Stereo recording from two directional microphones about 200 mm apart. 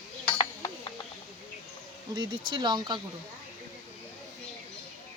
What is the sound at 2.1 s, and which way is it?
Speech, 20° right (ahead or behind).